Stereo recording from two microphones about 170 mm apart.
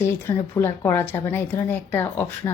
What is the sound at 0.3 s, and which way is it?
A woman's voice, 20° left (ahead or behind).